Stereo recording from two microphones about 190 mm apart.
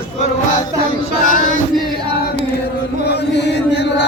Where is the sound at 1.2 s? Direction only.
45° left (ahead or behind).